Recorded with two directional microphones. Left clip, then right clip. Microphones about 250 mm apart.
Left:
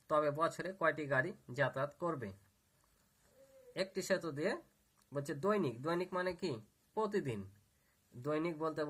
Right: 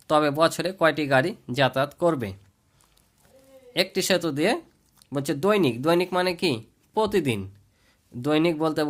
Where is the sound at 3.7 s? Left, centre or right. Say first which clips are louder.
Right 14 dB; right.